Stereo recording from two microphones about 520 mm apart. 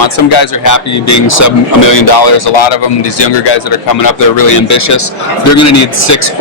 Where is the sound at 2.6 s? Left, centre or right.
Left.